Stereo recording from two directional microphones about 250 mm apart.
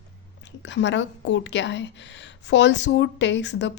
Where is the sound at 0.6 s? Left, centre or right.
Left.